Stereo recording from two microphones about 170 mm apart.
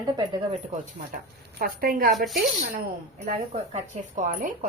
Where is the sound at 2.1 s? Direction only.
Centre (ahead or behind).